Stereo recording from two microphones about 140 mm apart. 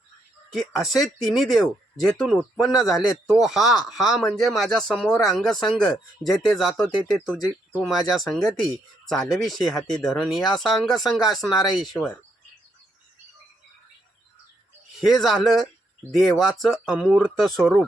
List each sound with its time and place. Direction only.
0.5 s speech: centre (ahead or behind)
15.0 s speech: centre (ahead or behind)